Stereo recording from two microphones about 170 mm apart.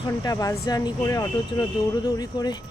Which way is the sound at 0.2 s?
20° left (ahead or behind).